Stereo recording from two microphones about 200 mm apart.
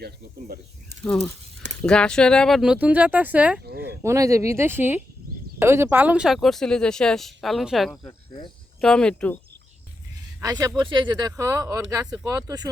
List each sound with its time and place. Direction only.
0.0 s speech: 50° right (ahead or behind)
1.0 s speech: 5° left (ahead or behind)
10.4 s speech: 15° right (ahead or behind)